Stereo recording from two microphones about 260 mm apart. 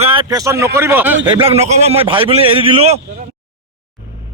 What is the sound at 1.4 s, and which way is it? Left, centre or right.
A man's voice, right.